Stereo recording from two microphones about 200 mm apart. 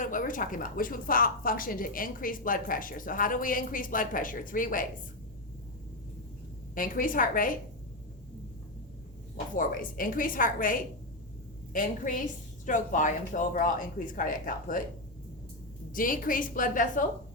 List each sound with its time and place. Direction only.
0.0 s a woman's voice: 40° left (ahead or behind)
6.7 s a woman's voice: 45° left (ahead or behind)
9.6 s a woman's voice: 45° left (ahead or behind)
15.9 s a woman's voice: 45° left (ahead or behind)